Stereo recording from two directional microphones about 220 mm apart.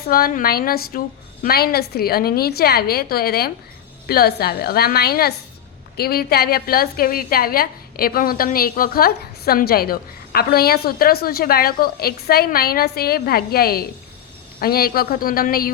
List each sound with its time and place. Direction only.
0.1 s a woman's voice: 40° left (ahead or behind)